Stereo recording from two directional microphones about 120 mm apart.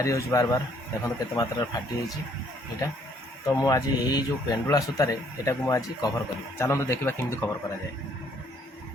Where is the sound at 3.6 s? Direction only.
30° left (ahead or behind).